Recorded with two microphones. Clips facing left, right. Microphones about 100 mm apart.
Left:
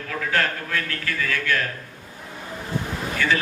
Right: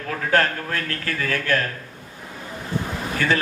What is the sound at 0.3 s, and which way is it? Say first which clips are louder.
A man's voice: right 4 dB; 40° right (ahead or behind).